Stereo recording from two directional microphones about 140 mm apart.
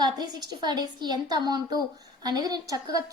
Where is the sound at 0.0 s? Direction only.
30° right (ahead or behind).